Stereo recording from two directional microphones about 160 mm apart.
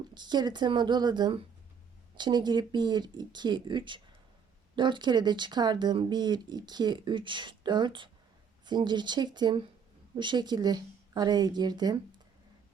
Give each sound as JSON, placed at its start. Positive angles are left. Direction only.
{"t": 0.1, "sound": "speech", "side_deg": -25}